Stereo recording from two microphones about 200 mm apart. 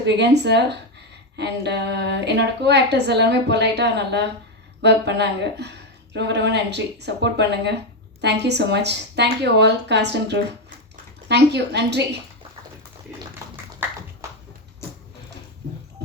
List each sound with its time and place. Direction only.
0.0 s a woman's voice: 60° right (ahead or behind)